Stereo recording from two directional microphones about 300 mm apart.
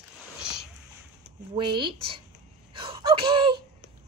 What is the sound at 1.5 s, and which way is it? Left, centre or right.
Speech, centre.